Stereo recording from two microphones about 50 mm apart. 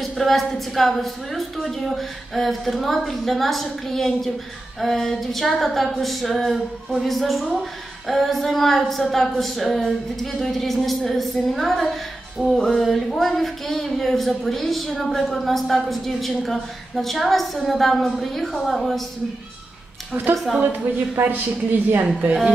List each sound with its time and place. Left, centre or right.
0.0 s speech: centre
20.6 s a woman's voice: right